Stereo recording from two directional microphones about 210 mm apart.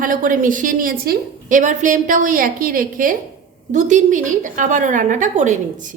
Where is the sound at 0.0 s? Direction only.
40° right (ahead or behind).